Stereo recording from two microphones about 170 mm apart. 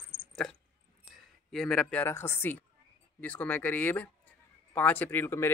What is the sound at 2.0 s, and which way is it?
Speech, 15° left (ahead or behind).